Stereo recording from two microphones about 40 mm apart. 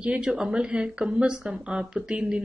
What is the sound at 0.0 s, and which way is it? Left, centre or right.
Speech, right.